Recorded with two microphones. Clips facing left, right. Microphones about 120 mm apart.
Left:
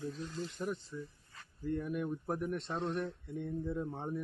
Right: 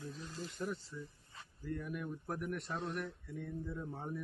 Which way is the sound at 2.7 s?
Centre (ahead or behind).